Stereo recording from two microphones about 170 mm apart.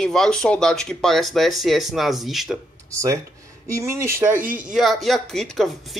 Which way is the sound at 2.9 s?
15° right (ahead or behind).